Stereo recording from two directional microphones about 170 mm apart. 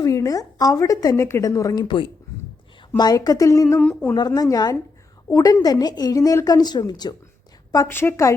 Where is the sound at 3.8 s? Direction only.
5° left (ahead or behind).